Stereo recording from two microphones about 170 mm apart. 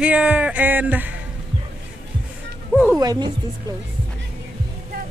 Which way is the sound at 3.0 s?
25° right (ahead or behind).